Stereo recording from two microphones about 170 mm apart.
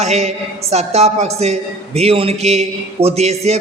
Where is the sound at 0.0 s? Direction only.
40° right (ahead or behind).